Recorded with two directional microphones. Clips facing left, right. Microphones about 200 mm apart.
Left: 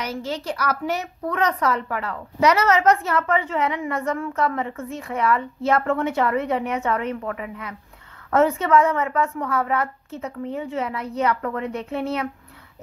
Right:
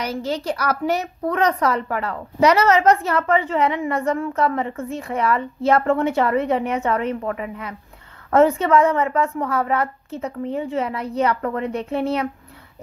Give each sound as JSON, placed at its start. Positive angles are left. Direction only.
{"t": 0.0, "sound": "a woman's voice", "side_deg": -35}